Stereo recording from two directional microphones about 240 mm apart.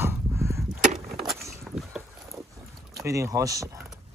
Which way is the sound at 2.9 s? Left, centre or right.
Centre.